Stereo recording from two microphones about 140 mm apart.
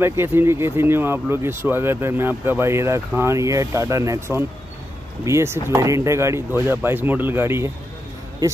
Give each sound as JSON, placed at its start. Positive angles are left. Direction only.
{"t": 0.0, "sound": "speech", "side_deg": -15}